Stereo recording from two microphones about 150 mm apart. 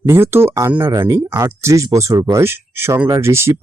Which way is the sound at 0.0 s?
15° right (ahead or behind).